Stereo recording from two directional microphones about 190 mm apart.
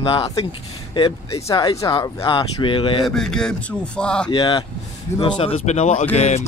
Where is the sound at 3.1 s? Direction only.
Centre (ahead or behind).